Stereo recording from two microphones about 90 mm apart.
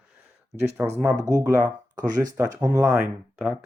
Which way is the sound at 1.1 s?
35° right (ahead or behind).